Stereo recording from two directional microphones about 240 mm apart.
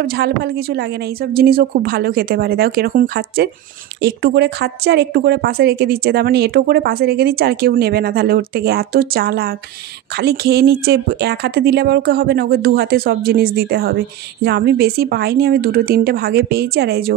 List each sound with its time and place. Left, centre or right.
0.0 s a woman's voice: right